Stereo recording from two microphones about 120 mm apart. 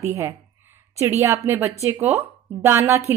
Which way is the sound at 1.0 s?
25° right (ahead or behind).